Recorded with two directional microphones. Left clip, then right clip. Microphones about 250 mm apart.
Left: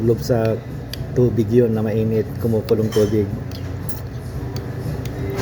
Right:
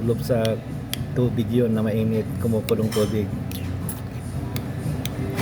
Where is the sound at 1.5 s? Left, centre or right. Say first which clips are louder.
Left 3 dB; centre.